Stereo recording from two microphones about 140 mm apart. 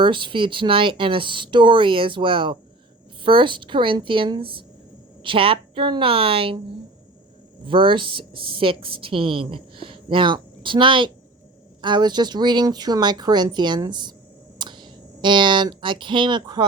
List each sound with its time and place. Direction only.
0.0 s a woman's voice: 35° right (ahead or behind)